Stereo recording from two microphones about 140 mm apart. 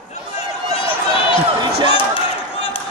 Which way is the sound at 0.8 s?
40° left (ahead or behind).